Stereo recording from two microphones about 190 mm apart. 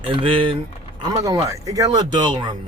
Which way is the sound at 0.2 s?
25° right (ahead or behind).